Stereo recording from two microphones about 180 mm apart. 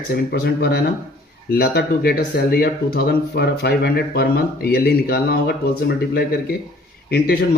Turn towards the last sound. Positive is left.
turn(degrees=60)  # may be behind; listen again after turning